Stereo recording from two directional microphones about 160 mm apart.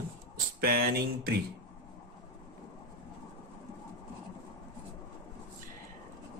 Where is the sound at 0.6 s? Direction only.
70° right (ahead or behind).